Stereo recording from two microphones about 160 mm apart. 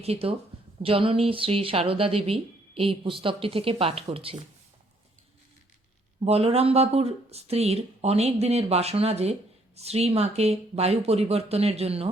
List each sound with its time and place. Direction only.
0.0 s speech: 40° right (ahead or behind)
6.2 s speech: 40° right (ahead or behind)